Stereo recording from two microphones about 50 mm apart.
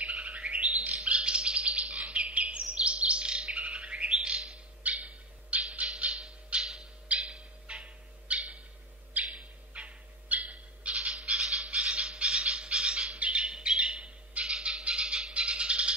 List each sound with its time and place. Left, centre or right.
0.2 s bird: right
4.8 s squawk: right
6.6 s a sound: centre
7.1 s bird: right
11.1 s bird: centre
11.7 s a sound: centre
12.3 s bird: centre
14.7 s a sound: right
15.3 s rattle: right